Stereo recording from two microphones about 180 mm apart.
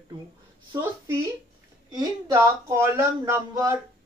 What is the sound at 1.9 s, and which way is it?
Speech, 20° right (ahead or behind).